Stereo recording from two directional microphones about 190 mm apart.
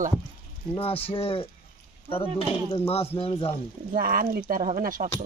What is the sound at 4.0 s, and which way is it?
Speech, 50° right (ahead or behind).